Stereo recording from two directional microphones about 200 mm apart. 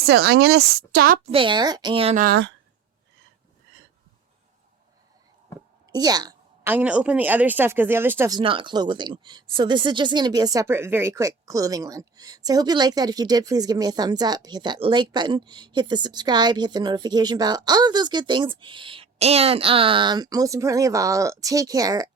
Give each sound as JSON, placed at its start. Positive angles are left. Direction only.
{"t": 0.0, "sound": "speech", "side_deg": -50}
{"t": 1.3, "sound": "a woman's voice", "side_deg": -25}
{"t": 2.1, "sound": "speech", "side_deg": -45}
{"t": 5.9, "sound": "a sound", "side_deg": -20}
{"t": 6.7, "sound": "speech", "side_deg": -5}
{"t": 8.4, "sound": "a woman's voice", "side_deg": -25}